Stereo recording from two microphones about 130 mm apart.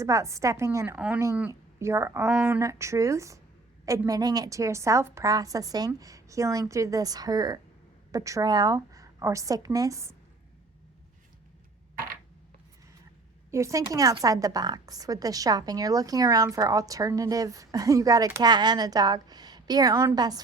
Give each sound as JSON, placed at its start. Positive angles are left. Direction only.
{"t": 0.0, "sound": "a woman's voice", "side_deg": -25}
{"t": 0.9, "sound": "speech", "side_deg": -10}
{"t": 1.8, "sound": "a woman's voice", "side_deg": -20}
{"t": 13.5, "sound": "a woman's voice", "side_deg": -25}